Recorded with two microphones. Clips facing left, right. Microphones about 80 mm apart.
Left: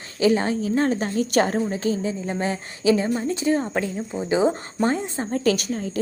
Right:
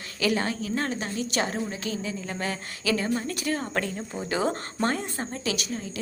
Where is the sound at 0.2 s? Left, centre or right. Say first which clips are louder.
Left 7 dB; left.